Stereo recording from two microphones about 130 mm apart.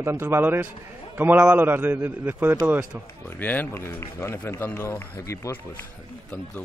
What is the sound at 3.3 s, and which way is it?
A man's voice, 15° left (ahead or behind).